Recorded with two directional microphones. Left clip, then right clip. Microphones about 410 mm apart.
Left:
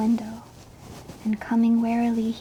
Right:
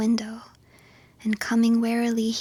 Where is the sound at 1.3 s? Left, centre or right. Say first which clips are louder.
Even; right.